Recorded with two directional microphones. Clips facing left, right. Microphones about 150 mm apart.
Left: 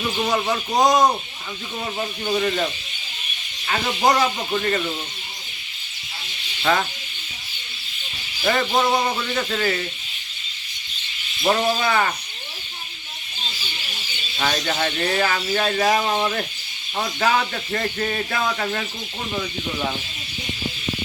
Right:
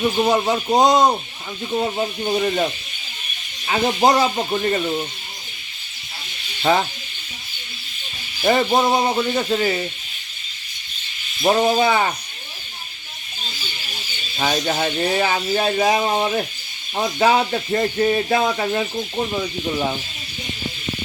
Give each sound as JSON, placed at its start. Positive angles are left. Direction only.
{"t": 0.3, "sound": "speech", "side_deg": -25}
{"t": 2.2, "sound": "speech", "side_deg": -25}
{"t": 3.7, "sound": "speech", "side_deg": -25}
{"t": 6.6, "sound": "speech", "side_deg": -25}
{"t": 8.4, "sound": "speech", "side_deg": -25}
{"t": 11.4, "sound": "speech", "side_deg": -25}
{"t": 14.3, "sound": "speech", "side_deg": -15}